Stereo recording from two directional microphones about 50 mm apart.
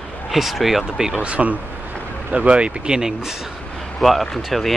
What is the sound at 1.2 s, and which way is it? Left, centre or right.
Speech, right.